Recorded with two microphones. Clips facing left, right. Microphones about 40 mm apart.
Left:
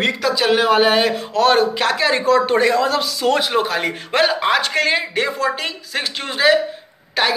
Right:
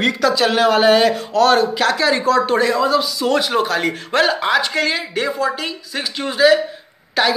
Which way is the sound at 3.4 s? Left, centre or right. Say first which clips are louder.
Right 1 dB; centre.